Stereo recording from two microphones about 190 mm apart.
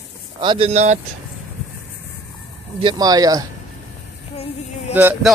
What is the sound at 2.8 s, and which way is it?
Speech, 20° right (ahead or behind).